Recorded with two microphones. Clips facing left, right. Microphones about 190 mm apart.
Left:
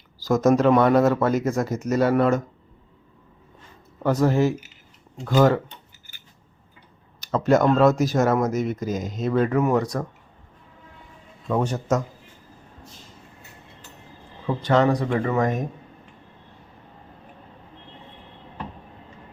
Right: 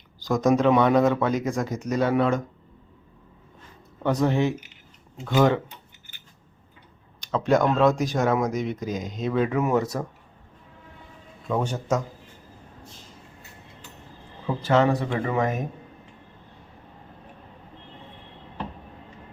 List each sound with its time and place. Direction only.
0.3 s speech: 5° left (ahead or behind)
4.0 s speech: centre (ahead or behind)
7.2 s speech: 5° left (ahead or behind)
11.6 s a man's voice: 10° right (ahead or behind)
14.6 s speech: 5° right (ahead or behind)